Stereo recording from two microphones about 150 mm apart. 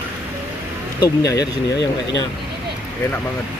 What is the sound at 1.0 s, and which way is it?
Speech, 25° left (ahead or behind).